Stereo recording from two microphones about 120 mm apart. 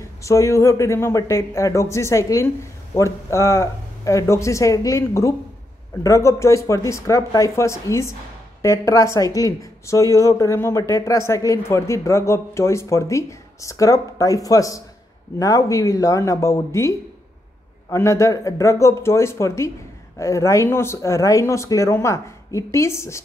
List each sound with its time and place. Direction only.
0.2 s speech: 25° left (ahead or behind)
17.9 s speech: 25° left (ahead or behind)